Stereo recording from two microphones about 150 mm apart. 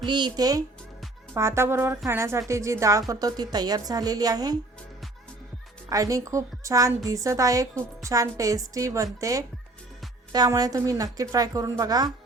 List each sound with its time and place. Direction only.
0.0 s a woman's voice: 30° right (ahead or behind)
5.9 s a woman's voice: 25° right (ahead or behind)
10.3 s a woman's voice: 25° right (ahead or behind)